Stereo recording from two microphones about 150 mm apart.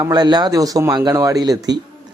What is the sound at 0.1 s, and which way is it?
Speech, 30° right (ahead or behind).